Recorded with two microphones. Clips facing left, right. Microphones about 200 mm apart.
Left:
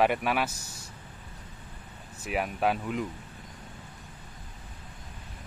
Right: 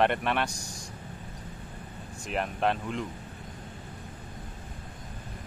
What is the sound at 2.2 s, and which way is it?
Speech, 5° left (ahead or behind).